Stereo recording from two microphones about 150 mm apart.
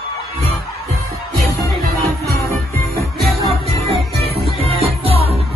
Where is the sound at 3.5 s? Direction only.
40° right (ahead or behind).